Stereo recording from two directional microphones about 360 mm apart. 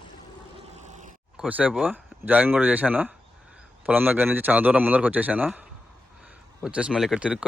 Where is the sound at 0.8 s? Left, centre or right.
Centre.